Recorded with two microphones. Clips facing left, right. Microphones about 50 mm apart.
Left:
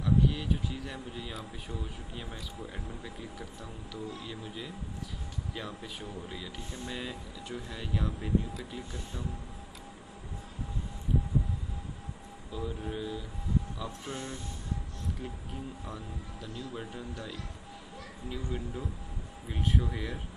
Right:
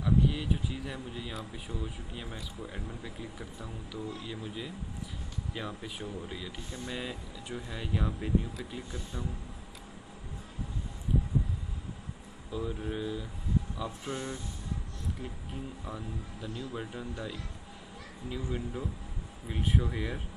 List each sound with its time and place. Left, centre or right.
0.0 s speech: centre
12.5 s speech: centre
14.1 s speech: right
15.8 s speech: centre